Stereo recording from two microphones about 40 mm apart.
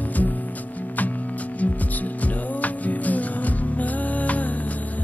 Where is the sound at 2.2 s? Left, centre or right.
Left.